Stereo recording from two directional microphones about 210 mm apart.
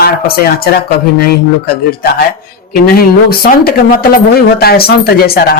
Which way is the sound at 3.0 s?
45° left (ahead or behind).